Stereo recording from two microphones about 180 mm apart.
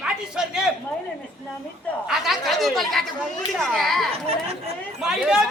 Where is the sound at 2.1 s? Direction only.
Centre (ahead or behind).